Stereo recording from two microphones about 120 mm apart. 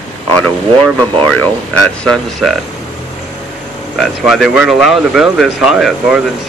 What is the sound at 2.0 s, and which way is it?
Speech, 5° left (ahead or behind).